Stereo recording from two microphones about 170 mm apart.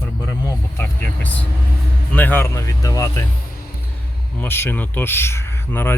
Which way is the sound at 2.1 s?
10° left (ahead or behind).